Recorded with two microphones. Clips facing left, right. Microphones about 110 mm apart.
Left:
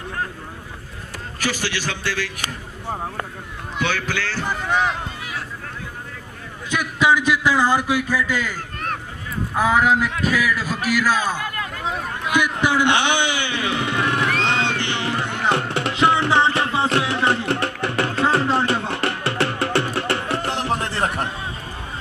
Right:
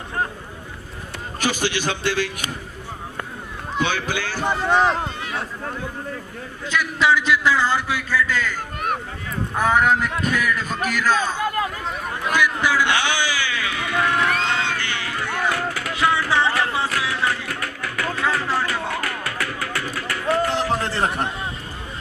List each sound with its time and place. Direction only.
1.4 s a man's voice: 20° right (ahead or behind)
3.8 s a man's voice: 20° right (ahead or behind)
4.5 s speech: 30° right (ahead or behind)
6.7 s a man's voice: 15° left (ahead or behind)
8.5 s a sound: 15° right (ahead or behind)
9.6 s a man's voice: centre (ahead or behind)
12.3 s music: 20° left (ahead or behind)